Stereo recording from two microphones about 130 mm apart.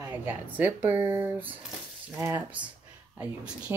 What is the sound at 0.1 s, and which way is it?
Speech, 15° right (ahead or behind).